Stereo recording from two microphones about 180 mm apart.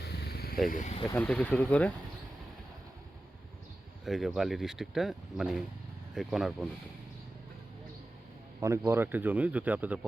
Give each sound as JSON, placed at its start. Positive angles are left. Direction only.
{"t": 0.3, "sound": "wild animals", "side_deg": 60}
{"t": 0.7, "sound": "speech", "side_deg": 40}
{"t": 1.0, "sound": "speech", "side_deg": 10}
{"t": 4.0, "sound": "speech", "side_deg": 0}
{"t": 8.6, "sound": "speech", "side_deg": -15}